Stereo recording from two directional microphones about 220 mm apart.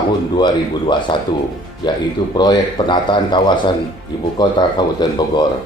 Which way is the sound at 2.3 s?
20° left (ahead or behind).